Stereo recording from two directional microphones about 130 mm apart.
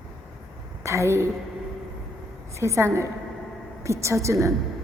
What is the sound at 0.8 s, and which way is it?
Speech, 20° right (ahead or behind).